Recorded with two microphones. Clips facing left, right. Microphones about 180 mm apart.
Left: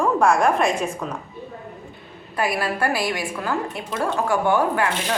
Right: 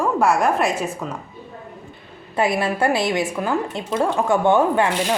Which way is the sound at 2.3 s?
25° right (ahead or behind).